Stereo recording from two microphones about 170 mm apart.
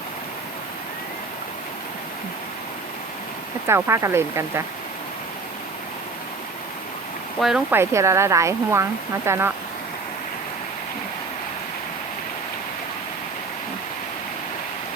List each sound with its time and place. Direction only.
3.7 s speech: 15° right (ahead or behind)
7.3 s speech: 5° right (ahead or behind)